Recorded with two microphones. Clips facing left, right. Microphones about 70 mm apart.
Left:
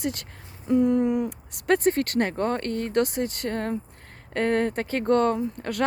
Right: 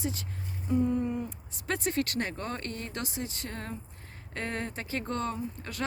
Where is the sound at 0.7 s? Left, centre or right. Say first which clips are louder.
Left 7 dB; left.